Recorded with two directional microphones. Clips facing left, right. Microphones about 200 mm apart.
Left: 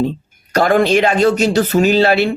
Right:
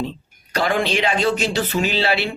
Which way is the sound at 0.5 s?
45° left (ahead or behind).